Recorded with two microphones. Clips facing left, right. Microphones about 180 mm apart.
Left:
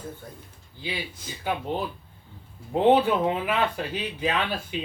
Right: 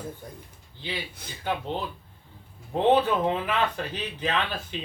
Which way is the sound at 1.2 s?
60° right (ahead or behind).